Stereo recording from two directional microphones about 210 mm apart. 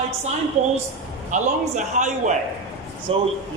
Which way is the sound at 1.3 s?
35° right (ahead or behind).